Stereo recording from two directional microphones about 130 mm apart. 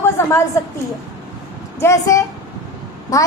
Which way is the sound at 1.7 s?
25° left (ahead or behind).